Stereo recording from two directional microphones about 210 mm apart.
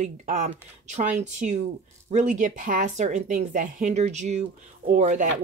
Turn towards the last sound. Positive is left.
turn(degrees=-35)  # may be behind; listen again after turning